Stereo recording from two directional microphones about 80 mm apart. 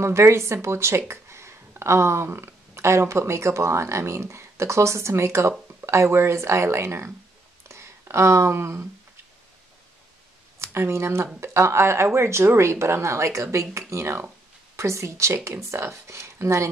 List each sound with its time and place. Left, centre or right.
0.0 s speech: right
7.6 s a sound: right
10.6 s speech: right